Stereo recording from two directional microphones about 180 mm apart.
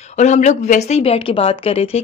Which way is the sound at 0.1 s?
40° left (ahead or behind).